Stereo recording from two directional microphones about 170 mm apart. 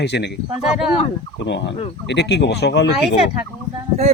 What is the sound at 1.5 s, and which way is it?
Speech, 90° left.